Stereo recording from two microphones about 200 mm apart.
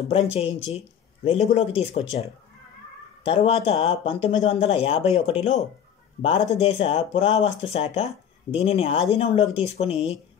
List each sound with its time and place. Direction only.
0.1 s speech: 30° left (ahead or behind)